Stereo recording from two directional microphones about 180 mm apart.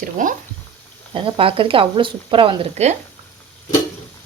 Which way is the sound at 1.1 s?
30° right (ahead or behind).